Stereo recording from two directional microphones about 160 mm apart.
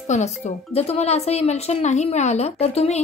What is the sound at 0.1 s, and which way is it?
Speech, 50° left (ahead or behind).